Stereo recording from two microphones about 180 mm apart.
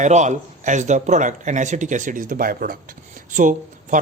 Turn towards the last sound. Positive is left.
turn(degrees=-45)  # may be behind; listen again after turning